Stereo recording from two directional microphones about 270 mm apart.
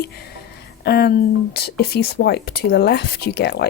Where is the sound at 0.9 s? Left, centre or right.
Left.